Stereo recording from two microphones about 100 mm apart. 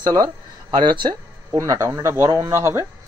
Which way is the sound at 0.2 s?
50° right (ahead or behind).